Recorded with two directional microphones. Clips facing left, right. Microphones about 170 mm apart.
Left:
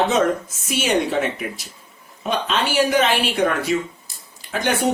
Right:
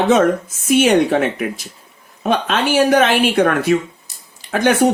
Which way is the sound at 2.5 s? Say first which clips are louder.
Right 4 dB; 50° right (ahead or behind).